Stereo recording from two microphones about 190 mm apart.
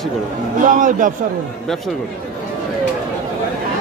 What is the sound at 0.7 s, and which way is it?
Speech, 45° right (ahead or behind).